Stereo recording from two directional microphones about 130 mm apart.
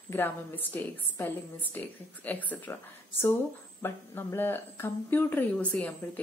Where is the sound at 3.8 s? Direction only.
20° left (ahead or behind).